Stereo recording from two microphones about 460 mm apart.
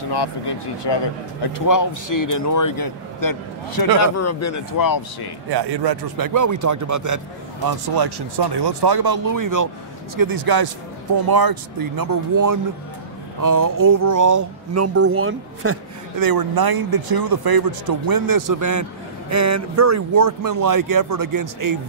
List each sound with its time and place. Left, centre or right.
0.1 s speech: left
1.5 s speech: left
4.0 s speech: left
5.5 s speech: right
7.6 s speech: right
16.2 s speech: right